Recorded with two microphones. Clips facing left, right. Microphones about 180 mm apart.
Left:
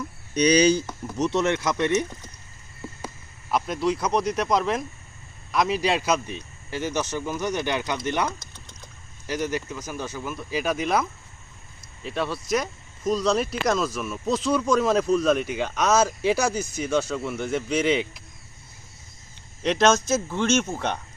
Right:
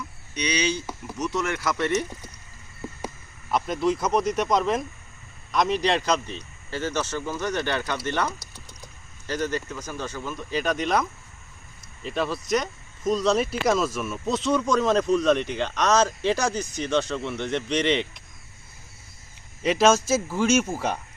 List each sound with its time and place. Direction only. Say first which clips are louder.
0.3 s speech: left 8 dB; 40° left (ahead or behind)
1.2 s speech: left 4 dB; 25° left (ahead or behind)
3.5 s speech: even; centre (ahead or behind)
8.3 s a sound: left 1 dB; 10° right (ahead or behind)
9.2 s speech: even; 10° left (ahead or behind)
19.6 s speech: right 1 dB; 5° right (ahead or behind)